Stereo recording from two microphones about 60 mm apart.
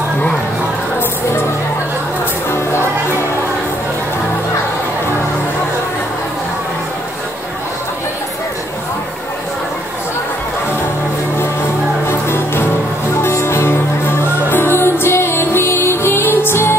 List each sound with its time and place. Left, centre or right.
2.5 s music: left
12.1 s music: left
13.3 s music: left